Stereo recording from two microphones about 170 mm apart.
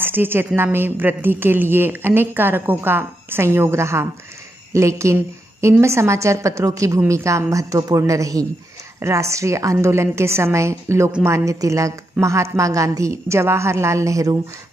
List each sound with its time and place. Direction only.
0.0 s a woman's voice: 10° right (ahead or behind)
11.3 s a woman's voice: 20° right (ahead or behind)